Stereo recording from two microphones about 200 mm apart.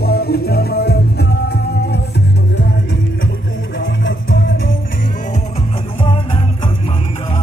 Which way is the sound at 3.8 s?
70° left (ahead or behind).